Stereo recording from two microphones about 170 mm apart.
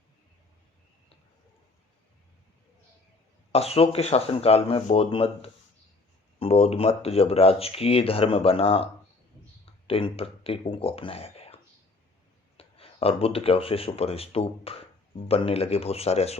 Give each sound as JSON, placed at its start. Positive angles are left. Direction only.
{"t": 3.5, "sound": "speech", "side_deg": 35}